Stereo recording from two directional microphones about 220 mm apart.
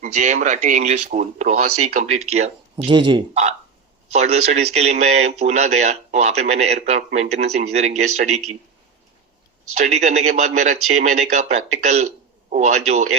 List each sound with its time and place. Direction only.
0.0 s speech: 30° right (ahead or behind)
9.8 s speech: 30° right (ahead or behind)